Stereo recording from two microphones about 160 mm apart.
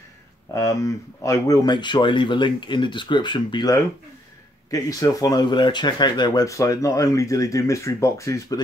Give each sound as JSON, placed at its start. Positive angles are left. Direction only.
{"t": 0.6, "sound": "speech", "side_deg": 20}